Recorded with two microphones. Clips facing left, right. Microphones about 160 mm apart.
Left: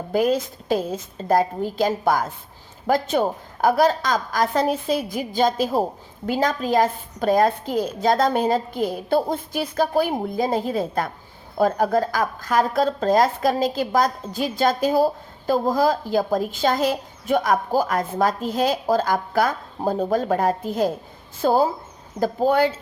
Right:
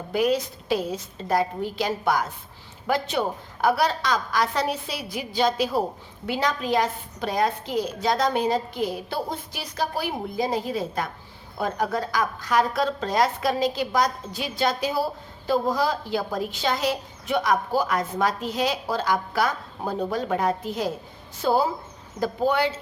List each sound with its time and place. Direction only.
0.1 s speech: 45° left (ahead or behind)